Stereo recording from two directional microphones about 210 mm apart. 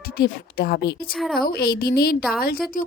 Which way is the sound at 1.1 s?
Centre (ahead or behind).